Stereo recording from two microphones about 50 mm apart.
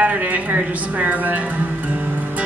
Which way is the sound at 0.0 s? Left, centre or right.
Right.